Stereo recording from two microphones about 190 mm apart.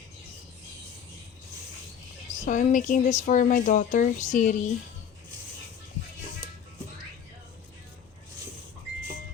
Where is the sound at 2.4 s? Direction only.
40° left (ahead or behind).